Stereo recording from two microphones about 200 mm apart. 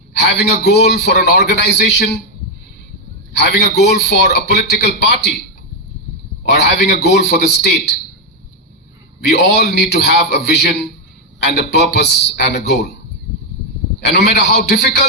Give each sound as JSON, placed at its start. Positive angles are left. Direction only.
{"t": 0.1, "sound": "a man's voice", "side_deg": 55}
{"t": 3.3, "sound": "a man's voice", "side_deg": 55}
{"t": 6.4, "sound": "a man's voice", "side_deg": 55}
{"t": 9.3, "sound": "a man's voice", "side_deg": 55}
{"t": 14.0, "sound": "a man's voice", "side_deg": 55}